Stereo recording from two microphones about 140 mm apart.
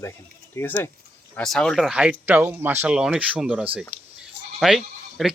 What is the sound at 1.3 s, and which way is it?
Speech, 5° left (ahead or behind).